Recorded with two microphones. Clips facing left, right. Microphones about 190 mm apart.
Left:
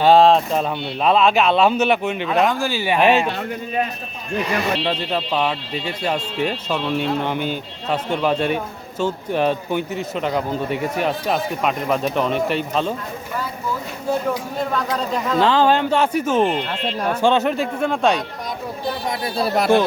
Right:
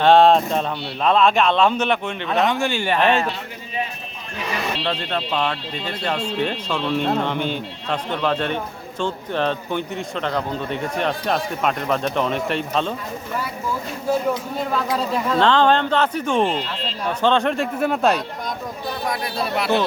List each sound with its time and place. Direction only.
0.0 s speech: centre (ahead or behind)
4.9 s speech: 5° left (ahead or behind)
14.7 s speech: 5° right (ahead or behind)
16.6 s speech: 50° left (ahead or behind)
17.2 s speech: 10° left (ahead or behind)
19.0 s speech: 25° left (ahead or behind)
19.5 s speech: 45° left (ahead or behind)